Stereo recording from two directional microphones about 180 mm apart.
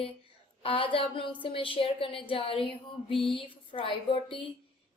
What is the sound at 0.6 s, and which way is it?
A woman's voice, 30° left (ahead or behind).